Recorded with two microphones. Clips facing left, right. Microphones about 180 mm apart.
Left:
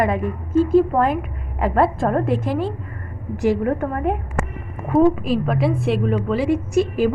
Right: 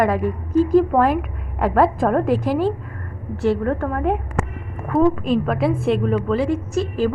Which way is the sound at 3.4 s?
10° left (ahead or behind).